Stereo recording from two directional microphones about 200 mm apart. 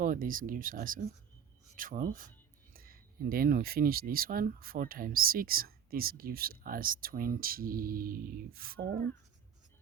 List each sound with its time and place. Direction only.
0.0 s speech: 45° right (ahead or behind)